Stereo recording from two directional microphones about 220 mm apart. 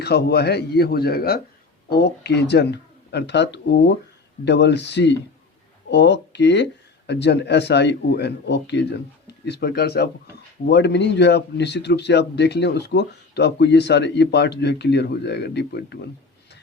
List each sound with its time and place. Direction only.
0.0 s speech: 45° left (ahead or behind)